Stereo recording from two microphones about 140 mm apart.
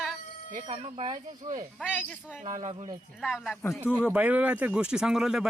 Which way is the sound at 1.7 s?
5° right (ahead or behind).